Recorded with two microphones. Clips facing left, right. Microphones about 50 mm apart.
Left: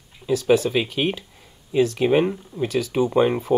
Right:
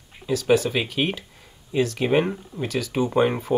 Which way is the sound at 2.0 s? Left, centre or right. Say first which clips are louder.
Left 2 dB; centre.